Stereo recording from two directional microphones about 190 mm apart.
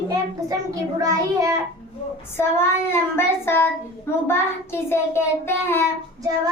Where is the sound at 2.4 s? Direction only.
10° left (ahead or behind).